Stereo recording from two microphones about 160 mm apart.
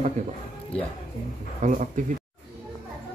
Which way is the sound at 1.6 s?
55° right (ahead or behind).